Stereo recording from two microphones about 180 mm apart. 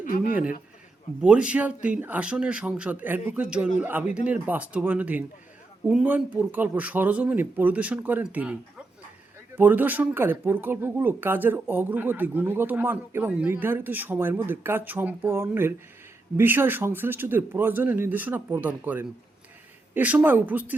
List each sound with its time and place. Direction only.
0.0 s a man's voice: 50° left (ahead or behind)
1.2 s speech: 5° right (ahead or behind)
9.6 s speech: 10° right (ahead or behind)